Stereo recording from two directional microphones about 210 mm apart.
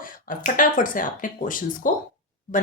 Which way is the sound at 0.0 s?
40° left (ahead or behind).